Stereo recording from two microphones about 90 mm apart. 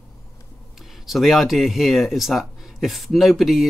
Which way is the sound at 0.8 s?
Centre (ahead or behind).